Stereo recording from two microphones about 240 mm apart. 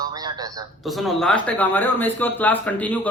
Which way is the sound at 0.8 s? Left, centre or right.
Centre.